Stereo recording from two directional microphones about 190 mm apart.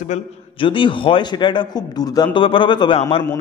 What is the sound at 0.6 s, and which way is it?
A man's voice, 25° left (ahead or behind).